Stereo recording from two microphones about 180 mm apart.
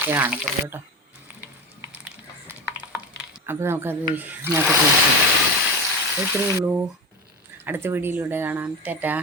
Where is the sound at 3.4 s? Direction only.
15° right (ahead or behind).